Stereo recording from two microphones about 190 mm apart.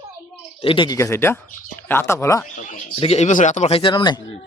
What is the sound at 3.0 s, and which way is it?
Speech, 35° left (ahead or behind).